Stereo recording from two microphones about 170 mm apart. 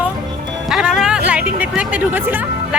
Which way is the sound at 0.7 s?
5° right (ahead or behind).